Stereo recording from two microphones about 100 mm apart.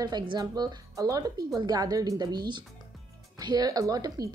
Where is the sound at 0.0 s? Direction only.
45° right (ahead or behind).